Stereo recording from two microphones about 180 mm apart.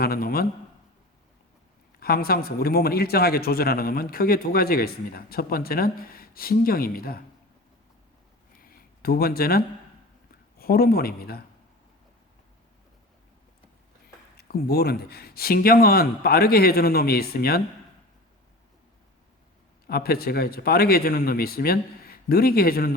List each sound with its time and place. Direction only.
0.0 s a man's voice: 55° left (ahead or behind)
2.0 s a man's voice: 55° left (ahead or behind)
8.6 s a sound: 55° left (ahead or behind)
10.6 s a man's voice: 60° left (ahead or behind)
14.3 s a man's voice: 60° left (ahead or behind)
19.9 s a man's voice: 60° left (ahead or behind)